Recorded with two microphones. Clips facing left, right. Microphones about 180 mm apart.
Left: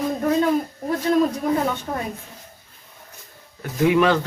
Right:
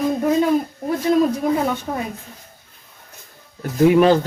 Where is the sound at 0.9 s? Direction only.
10° right (ahead or behind).